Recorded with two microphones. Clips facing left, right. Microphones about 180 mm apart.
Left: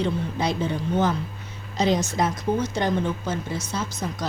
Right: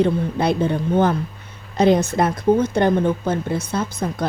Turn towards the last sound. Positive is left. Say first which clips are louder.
# right 6 dB
turn(degrees=-55)  # may be behind; listen again after turning